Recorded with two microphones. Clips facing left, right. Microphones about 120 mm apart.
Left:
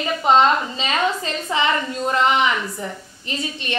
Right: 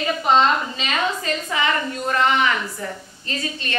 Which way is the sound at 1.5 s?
20° left (ahead or behind).